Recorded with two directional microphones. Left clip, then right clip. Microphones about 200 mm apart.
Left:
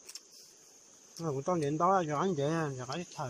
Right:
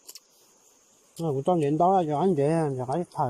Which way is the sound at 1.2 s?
35° right (ahead or behind).